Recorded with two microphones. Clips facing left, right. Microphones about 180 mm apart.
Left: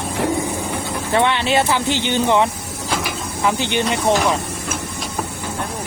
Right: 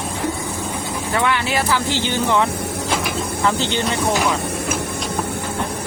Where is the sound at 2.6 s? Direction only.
60° right (ahead or behind).